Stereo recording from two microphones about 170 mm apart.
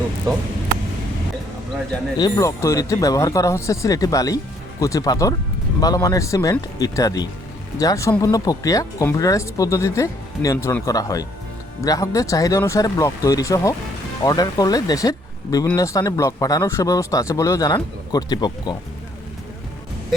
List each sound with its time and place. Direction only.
2.1 s speech: 25° left (ahead or behind)